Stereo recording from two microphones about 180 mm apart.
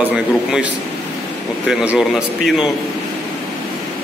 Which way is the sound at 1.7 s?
5° right (ahead or behind).